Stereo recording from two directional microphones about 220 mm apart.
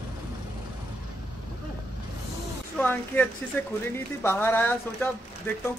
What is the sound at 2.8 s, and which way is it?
Speech, 10° left (ahead or behind).